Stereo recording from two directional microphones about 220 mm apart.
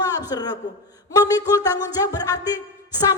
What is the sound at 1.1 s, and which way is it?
Music, 15° left (ahead or behind).